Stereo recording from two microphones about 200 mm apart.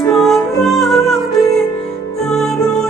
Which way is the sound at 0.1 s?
Centre (ahead or behind).